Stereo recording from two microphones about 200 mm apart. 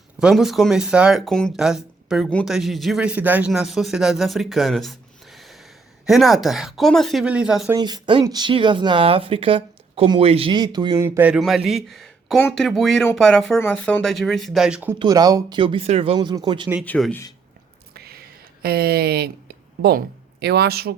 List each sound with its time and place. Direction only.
0.2 s speech: centre (ahead or behind)
7.8 s speech: 20° right (ahead or behind)
14.9 s speech: 20° right (ahead or behind)
16.8 s speech: 10° left (ahead or behind)
17.9 s a sound: 50° right (ahead or behind)
18.6 s speech: 50° right (ahead or behind)
20.4 s speech: 55° right (ahead or behind)